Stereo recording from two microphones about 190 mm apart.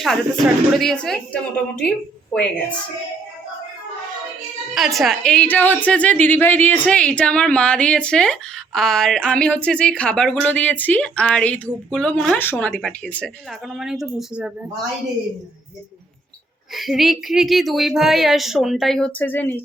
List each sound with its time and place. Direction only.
0.0 s a woman's voice: centre (ahead or behind)
4.9 s a woman's voice: centre (ahead or behind)
16.7 s a woman's voice: centre (ahead or behind)